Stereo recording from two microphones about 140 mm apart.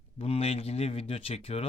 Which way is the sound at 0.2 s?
45° left (ahead or behind).